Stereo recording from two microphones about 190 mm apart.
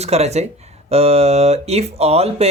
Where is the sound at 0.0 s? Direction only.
35° right (ahead or behind).